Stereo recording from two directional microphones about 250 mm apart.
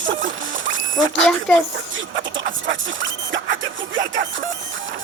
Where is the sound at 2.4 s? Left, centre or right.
Right.